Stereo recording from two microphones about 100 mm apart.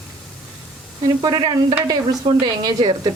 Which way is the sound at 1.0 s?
40° right (ahead or behind).